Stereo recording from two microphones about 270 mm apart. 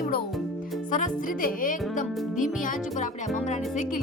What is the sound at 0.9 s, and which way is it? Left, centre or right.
Speech, left.